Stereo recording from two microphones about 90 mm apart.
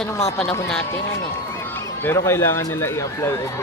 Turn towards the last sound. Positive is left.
turn(degrees=30)  # may be behind; listen again after turning